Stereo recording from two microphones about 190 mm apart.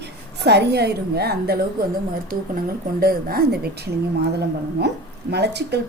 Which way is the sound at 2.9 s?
50° right (ahead or behind).